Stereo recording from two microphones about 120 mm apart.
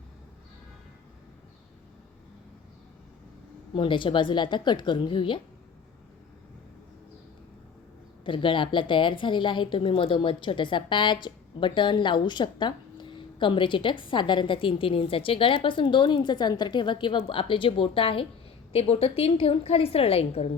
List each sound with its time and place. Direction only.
3.8 s a woman's voice: 45° left (ahead or behind)
8.2 s a woman's voice: 45° left (ahead or behind)